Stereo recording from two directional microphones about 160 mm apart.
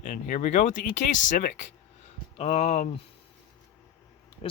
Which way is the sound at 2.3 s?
40° left (ahead or behind).